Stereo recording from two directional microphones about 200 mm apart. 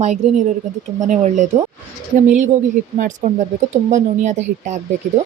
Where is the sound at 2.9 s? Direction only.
40° right (ahead or behind).